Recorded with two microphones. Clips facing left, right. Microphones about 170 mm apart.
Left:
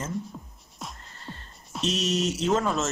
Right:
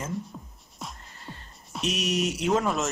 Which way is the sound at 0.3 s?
Centre (ahead or behind).